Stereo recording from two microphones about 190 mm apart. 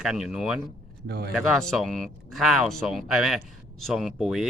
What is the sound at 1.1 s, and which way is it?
Speech, 60° right (ahead or behind).